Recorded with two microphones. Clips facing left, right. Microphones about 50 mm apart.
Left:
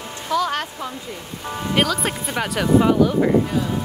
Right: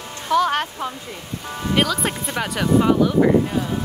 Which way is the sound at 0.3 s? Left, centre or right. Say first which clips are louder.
Right 3 dB; right.